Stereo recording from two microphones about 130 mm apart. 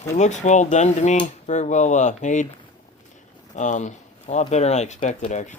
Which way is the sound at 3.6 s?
65° left (ahead or behind).